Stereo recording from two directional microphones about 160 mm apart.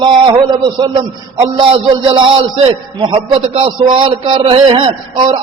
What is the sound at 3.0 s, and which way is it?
A man's voice, 30° right (ahead or behind).